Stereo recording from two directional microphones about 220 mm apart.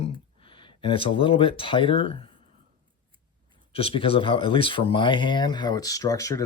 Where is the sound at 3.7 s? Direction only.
25° left (ahead or behind).